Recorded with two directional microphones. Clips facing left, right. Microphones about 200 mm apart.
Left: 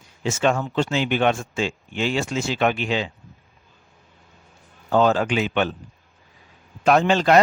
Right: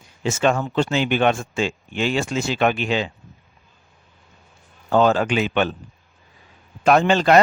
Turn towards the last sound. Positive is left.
turn(degrees=-55)  # may be behind; listen again after turning